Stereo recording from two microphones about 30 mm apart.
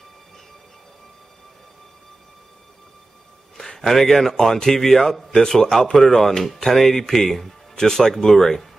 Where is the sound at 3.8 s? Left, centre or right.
Centre.